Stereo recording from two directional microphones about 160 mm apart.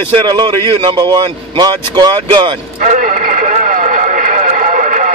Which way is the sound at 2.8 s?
55° right (ahead or behind).